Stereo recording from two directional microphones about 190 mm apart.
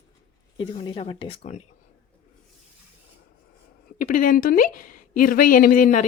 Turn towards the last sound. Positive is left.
turn(degrees=45)  # may be behind; listen again after turning